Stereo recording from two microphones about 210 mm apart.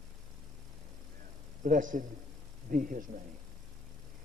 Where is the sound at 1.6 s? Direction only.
40° right (ahead or behind).